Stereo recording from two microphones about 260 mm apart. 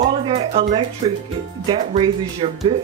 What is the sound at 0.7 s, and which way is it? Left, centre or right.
Speech, right.